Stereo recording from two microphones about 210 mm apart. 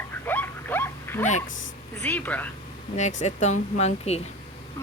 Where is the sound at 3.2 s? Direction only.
35° left (ahead or behind).